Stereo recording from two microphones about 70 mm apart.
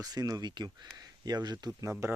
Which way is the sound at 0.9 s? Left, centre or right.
Right.